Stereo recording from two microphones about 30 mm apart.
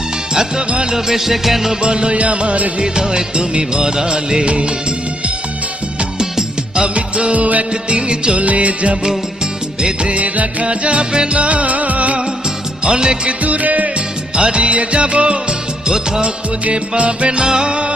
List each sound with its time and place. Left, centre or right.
0.9 s music: centre
1.8 s music: right
2.1 s music: right
2.8 s music of bollywood: right
6.8 s music: right
7.3 s music: right
7.7 s music: right
8.4 s music: right
11.3 s music: right
12.8 s music: right
13.4 s music: right
14.3 s music: right
16.7 s music: right